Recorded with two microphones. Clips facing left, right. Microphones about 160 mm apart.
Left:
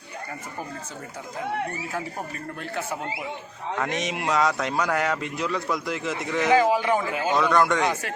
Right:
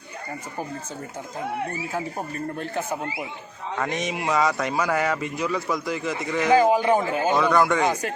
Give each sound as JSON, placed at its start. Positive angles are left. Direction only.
{"t": 3.8, "sound": "a man's voice", "side_deg": 0}
{"t": 6.7, "sound": "speech", "side_deg": -20}
{"t": 6.9, "sound": "speech", "side_deg": -40}
{"t": 7.4, "sound": "a man's voice", "side_deg": -5}